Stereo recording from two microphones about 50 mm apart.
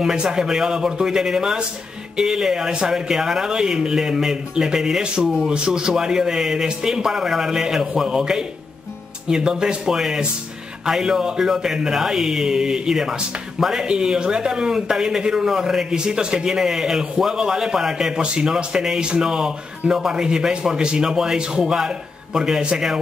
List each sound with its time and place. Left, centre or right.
0.0 s a man's voice: centre